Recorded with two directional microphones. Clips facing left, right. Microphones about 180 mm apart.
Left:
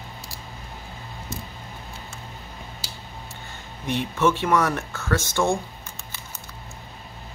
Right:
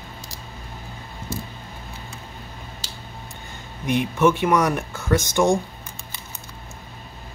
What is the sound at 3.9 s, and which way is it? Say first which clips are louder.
Speech: right 3 dB; 15° right (ahead or behind).